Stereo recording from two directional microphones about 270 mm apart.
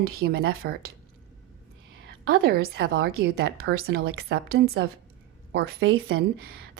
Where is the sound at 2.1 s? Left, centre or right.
Right.